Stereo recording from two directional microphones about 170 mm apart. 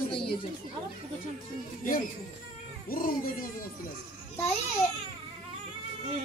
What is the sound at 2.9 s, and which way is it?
Speech, 55° left (ahead or behind).